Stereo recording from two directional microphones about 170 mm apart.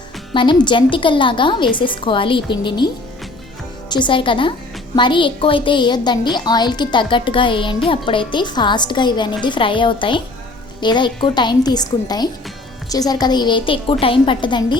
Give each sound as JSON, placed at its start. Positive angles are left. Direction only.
{"t": 0.3, "sound": "a woman's voice", "side_deg": 30}